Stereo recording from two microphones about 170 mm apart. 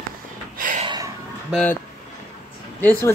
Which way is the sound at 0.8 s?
25° right (ahead or behind).